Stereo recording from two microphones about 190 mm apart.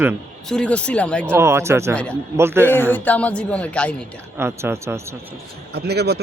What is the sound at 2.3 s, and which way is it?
Speech, 15° right (ahead or behind).